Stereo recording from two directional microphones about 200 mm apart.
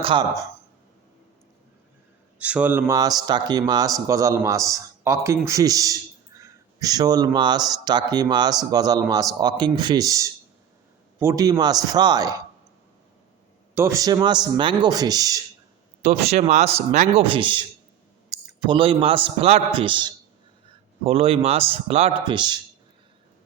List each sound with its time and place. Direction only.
0.0 s speech: 25° right (ahead or behind)
2.4 s speech: 5° right (ahead or behind)
13.7 s speech: 15° right (ahead or behind)
16.0 s a man's voice: 30° right (ahead or behind)